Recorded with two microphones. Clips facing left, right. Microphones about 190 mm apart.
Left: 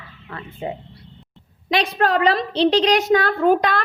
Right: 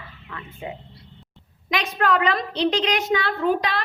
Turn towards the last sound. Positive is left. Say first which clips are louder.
# left 5 dB
turn(degrees=50)  # may be behind; listen again after turning